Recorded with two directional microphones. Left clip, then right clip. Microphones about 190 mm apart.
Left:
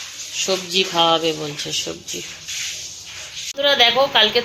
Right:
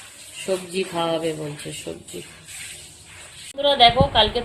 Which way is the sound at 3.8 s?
10° left (ahead or behind).